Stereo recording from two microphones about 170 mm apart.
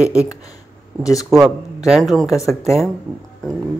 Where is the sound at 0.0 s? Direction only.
10° right (ahead or behind).